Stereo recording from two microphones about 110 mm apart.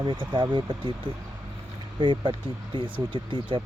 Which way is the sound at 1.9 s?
45° right (ahead or behind).